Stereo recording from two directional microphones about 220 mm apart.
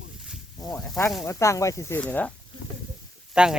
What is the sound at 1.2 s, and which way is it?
Speech, 15° left (ahead or behind).